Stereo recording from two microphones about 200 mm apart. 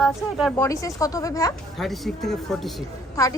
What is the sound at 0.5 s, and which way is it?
Speech, 15° left (ahead or behind).